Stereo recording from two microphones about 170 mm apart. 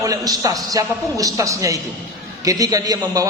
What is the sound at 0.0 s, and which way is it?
A man's voice, 20° right (ahead or behind).